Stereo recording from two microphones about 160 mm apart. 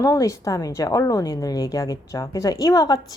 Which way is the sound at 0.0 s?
20° left (ahead or behind).